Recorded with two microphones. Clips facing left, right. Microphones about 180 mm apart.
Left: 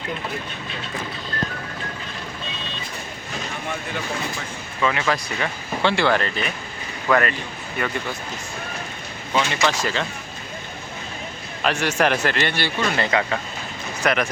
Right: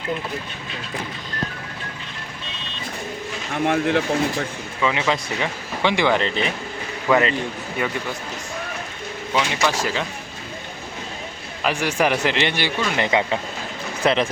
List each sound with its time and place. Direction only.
3.7 s speech: 70° right (ahead or behind)
4.8 s a man's voice: 15° right (ahead or behind)
9.3 s a man's voice: 10° right (ahead or behind)
11.6 s a man's voice: 10° right (ahead or behind)